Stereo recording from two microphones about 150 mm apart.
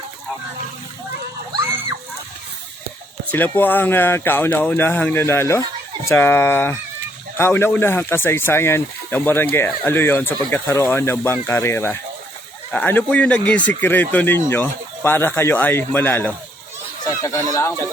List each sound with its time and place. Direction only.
3.2 s speech: 10° left (ahead or behind)